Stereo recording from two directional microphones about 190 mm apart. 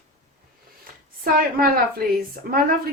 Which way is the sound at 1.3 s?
50° right (ahead or behind).